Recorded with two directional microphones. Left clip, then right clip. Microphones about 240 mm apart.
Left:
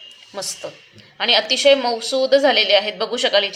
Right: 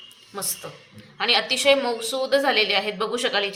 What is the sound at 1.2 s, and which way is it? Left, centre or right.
A woman's voice, left.